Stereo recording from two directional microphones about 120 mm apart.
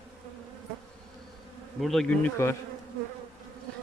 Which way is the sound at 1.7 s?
Centre (ahead or behind).